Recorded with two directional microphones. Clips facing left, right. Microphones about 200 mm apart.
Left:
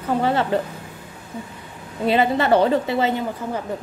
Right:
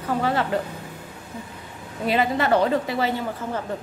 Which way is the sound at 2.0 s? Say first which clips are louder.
Left 3 dB; 25° left (ahead or behind).